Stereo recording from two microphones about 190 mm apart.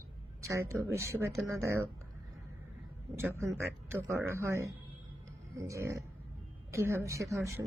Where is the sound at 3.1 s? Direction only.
15° right (ahead or behind).